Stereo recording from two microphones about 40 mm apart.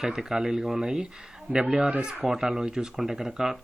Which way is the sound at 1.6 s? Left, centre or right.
Right.